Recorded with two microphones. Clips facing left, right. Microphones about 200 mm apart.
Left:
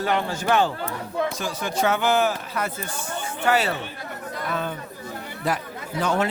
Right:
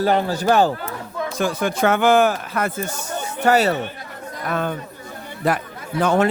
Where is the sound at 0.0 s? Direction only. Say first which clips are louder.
Right 6 dB; 35° right (ahead or behind).